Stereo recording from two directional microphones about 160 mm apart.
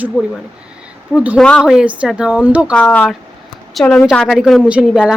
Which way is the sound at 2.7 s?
10° left (ahead or behind).